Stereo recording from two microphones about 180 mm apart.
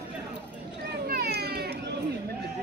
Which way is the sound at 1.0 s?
60° right (ahead or behind).